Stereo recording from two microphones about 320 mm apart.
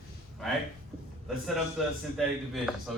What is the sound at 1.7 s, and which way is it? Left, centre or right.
A man's voice, centre.